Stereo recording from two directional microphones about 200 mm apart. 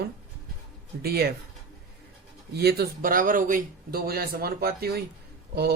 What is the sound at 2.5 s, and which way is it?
Mantra, 50° right (ahead or behind).